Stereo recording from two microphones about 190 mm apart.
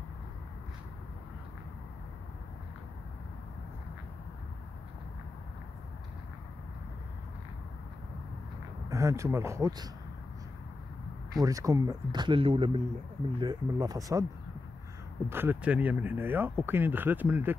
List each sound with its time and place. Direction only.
8.8 s speech: 15° right (ahead or behind)
11.3 s speech: 15° right (ahead or behind)
15.2 s speech: 10° right (ahead or behind)